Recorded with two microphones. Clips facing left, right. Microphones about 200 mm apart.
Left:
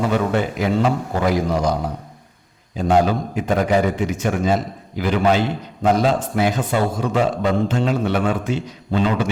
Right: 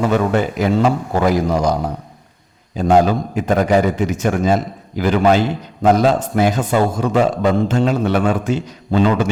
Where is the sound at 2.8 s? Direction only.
40° right (ahead or behind).